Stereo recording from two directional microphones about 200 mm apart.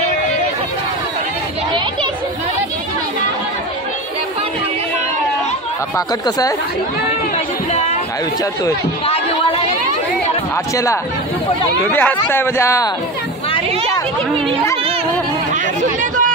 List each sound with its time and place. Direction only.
5.9 s speech: 15° left (ahead or behind)
9.0 s speech: 30° left (ahead or behind)
11.9 s speech: 10° left (ahead or behind)
15.5 s speech: 40° right (ahead or behind)